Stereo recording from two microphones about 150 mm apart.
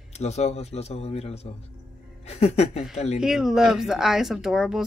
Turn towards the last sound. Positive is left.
turn(degrees=-5)  # may be behind; listen again after turning